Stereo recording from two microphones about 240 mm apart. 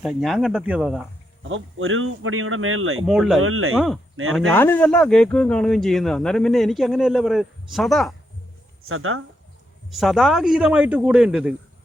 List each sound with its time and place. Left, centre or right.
0.0 s speech: centre
1.5 s speech: right
3.1 s speech: centre
3.4 s speech: right
3.8 s speech: centre
8.9 s speech: right
9.9 s speech: centre